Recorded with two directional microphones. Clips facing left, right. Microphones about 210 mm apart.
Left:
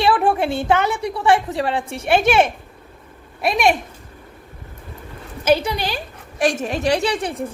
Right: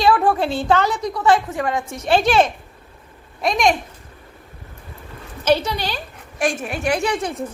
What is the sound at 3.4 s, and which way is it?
Speech, 5° left (ahead or behind).